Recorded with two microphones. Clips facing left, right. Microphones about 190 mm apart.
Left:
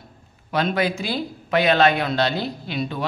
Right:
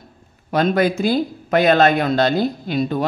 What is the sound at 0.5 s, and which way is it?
Speech, 45° right (ahead or behind).